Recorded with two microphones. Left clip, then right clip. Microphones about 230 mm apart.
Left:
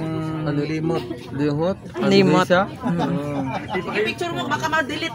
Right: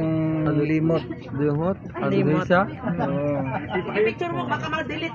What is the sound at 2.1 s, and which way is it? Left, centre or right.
Speech, left.